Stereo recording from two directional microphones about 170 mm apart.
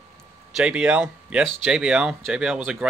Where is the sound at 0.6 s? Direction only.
5° right (ahead or behind).